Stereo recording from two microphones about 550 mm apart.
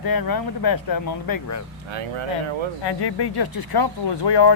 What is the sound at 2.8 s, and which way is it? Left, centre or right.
Speech, left.